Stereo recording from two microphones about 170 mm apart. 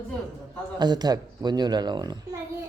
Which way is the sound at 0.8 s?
25° right (ahead or behind).